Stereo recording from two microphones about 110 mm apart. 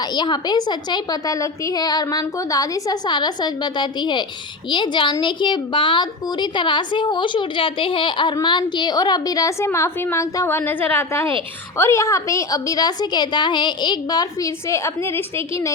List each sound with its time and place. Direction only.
0.1 s a woman's voice: 40° left (ahead or behind); by 15.7 s 25° left (ahead or behind)